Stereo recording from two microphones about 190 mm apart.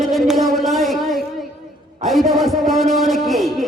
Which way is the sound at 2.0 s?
Centre (ahead or behind).